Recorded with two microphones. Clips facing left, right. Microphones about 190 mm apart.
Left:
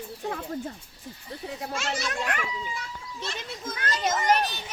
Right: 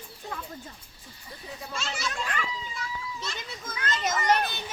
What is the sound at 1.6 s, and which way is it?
A child's voice, 65° left (ahead or behind).